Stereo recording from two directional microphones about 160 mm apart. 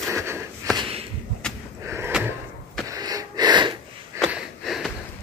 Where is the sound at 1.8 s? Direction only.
15° right (ahead or behind).